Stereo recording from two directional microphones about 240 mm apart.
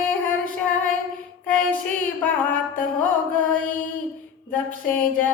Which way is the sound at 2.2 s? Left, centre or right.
Centre.